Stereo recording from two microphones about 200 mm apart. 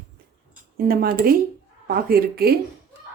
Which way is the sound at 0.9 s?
50° right (ahead or behind).